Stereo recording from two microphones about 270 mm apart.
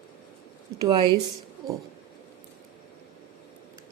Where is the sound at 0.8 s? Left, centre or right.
Centre.